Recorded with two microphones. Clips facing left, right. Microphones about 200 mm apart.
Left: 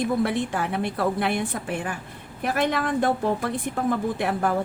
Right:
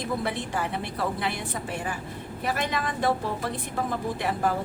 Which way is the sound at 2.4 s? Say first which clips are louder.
Left 5 dB; 55° left (ahead or behind).